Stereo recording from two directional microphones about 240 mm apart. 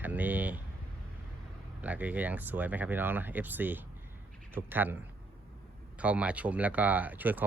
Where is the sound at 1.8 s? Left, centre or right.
Centre.